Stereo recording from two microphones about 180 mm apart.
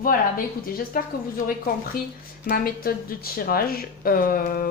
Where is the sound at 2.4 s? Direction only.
55° left (ahead or behind).